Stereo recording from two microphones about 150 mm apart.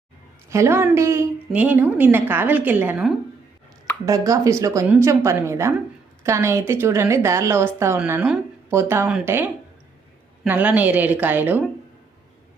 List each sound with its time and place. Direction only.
0.5 s a woman's voice: 20° right (ahead or behind)
4.0 s a woman's voice: 20° right (ahead or behind)